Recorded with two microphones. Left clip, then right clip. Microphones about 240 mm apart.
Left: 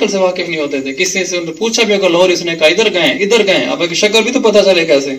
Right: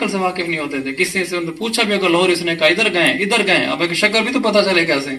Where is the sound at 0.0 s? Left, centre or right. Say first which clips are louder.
Left 6 dB; right.